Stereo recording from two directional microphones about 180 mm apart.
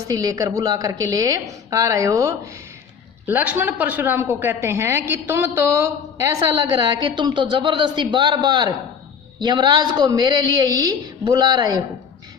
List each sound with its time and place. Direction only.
0.1 s a woman's voice: 20° right (ahead or behind)